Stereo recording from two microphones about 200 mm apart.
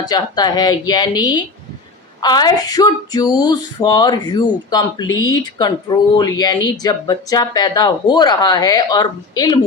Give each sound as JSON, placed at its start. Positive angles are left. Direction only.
{"t": 0.0, "sound": "speech", "side_deg": 20}